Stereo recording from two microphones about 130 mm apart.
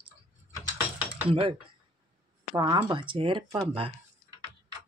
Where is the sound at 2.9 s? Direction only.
40° right (ahead or behind).